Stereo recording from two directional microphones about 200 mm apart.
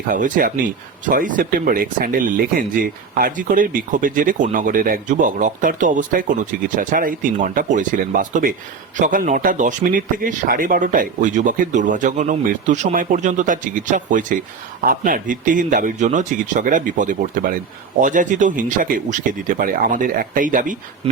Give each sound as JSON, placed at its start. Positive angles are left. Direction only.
{"t": 0.1, "sound": "speech", "side_deg": -45}